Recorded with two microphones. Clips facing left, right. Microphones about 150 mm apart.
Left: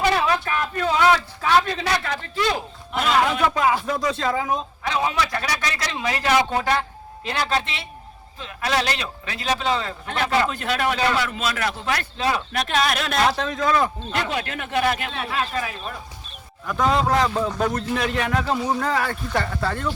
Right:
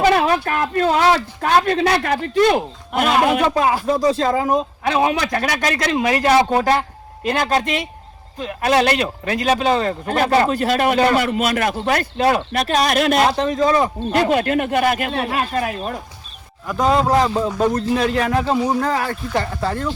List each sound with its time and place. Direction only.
0.1 s a sound: 50° right (ahead or behind)
0.9 s a man's voice: 35° right (ahead or behind)
1.6 s speech: 60° right (ahead or behind)
3.4 s a man's voice: 30° right (ahead or behind)
4.8 s a man's voice: 55° right (ahead or behind)
12.5 s a man's voice: 35° right (ahead or behind)
13.1 s a man's voice: 30° right (ahead or behind)
14.1 s a man's voice: 50° right (ahead or behind)
17.5 s a man's voice: 15° right (ahead or behind)
17.7 s a man's voice: 35° right (ahead or behind)